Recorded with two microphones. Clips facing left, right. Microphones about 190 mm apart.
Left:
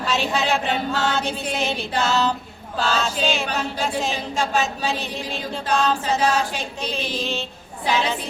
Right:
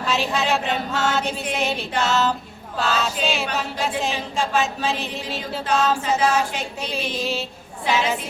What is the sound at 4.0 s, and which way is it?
Choir, centre (ahead or behind).